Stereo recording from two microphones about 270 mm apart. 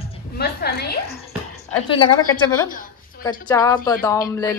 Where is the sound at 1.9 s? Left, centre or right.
Centre.